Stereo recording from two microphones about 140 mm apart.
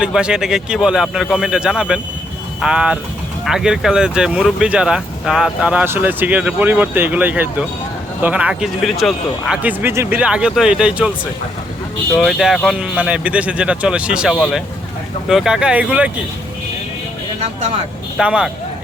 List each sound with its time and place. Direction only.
0.0 s speech: 5° right (ahead or behind)
9.6 s speech: 15° right (ahead or behind)
10.2 s speech: 5° right (ahead or behind)
12.2 s speech: centre (ahead or behind)
18.2 s speech: 5° right (ahead or behind)